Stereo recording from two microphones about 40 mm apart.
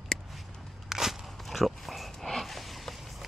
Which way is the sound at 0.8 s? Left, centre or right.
Centre.